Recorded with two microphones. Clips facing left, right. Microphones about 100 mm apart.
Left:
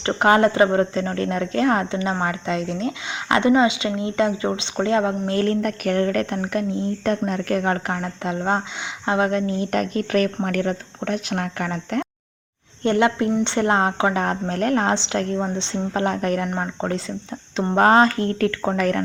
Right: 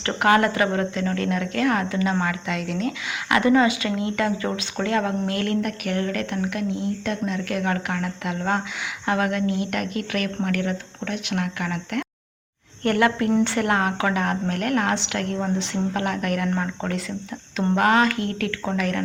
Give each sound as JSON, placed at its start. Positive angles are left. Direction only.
{"t": 0.0, "sound": "speech", "side_deg": 25}
{"t": 12.8, "sound": "speech", "side_deg": 20}